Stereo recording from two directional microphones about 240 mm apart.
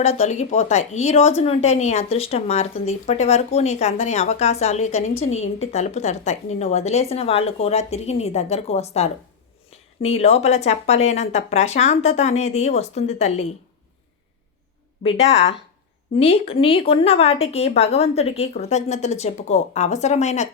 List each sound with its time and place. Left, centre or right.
0.0 s a woman's voice: left
15.0 s a woman's voice: left